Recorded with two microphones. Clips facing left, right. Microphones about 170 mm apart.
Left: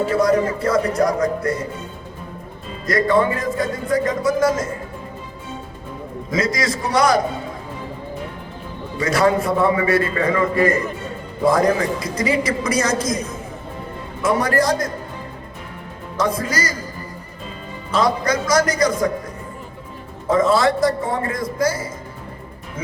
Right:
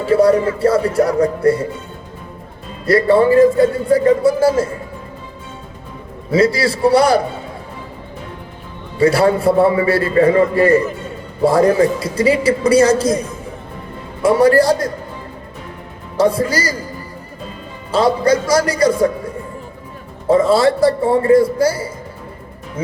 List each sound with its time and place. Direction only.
0.1 s a man's voice: 30° right (ahead or behind)
2.8 s speech: 30° right (ahead or behind)
6.3 s speech: 30° right (ahead or behind)
9.0 s speech: 30° right (ahead or behind)
14.2 s speech: 30° right (ahead or behind)
16.1 s speech: 30° right (ahead or behind)
17.9 s a man's voice: 30° right (ahead or behind)
20.2 s a man's voice: 30° right (ahead or behind)